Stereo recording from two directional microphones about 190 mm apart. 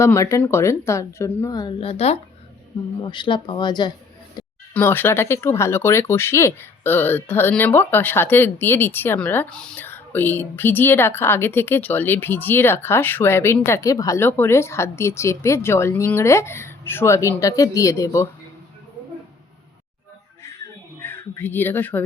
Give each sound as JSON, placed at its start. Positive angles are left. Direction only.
{"t": 0.0, "sound": "speech", "side_deg": 15}
{"t": 4.4, "sound": "a sound", "side_deg": 20}
{"t": 4.7, "sound": "speech", "side_deg": 10}
{"t": 21.0, "sound": "speech", "side_deg": 10}